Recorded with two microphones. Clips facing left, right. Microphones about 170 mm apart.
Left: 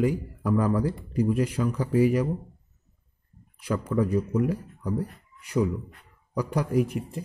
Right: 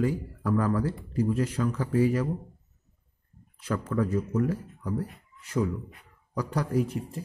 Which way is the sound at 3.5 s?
10° left (ahead or behind).